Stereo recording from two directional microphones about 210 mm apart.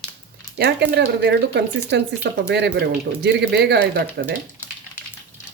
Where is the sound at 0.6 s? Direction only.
55° right (ahead or behind).